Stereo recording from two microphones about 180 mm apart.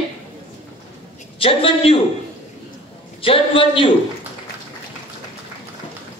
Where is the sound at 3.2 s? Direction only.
30° left (ahead or behind).